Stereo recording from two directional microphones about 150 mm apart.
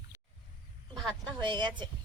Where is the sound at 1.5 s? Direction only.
30° right (ahead or behind).